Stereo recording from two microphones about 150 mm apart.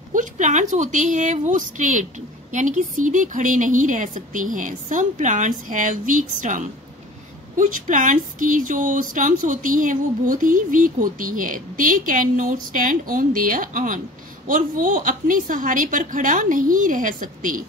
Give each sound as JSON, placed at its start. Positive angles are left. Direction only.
{"t": 0.1, "sound": "speech", "side_deg": -60}